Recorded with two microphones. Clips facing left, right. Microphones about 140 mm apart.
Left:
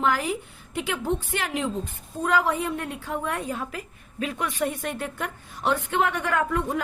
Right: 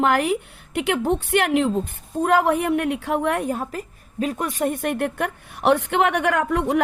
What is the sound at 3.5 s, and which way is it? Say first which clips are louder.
A woman's voice: right 4 dB; 40° right (ahead or behind).